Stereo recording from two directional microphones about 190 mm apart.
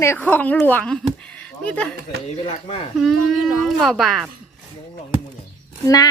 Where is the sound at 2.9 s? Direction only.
Centre (ahead or behind).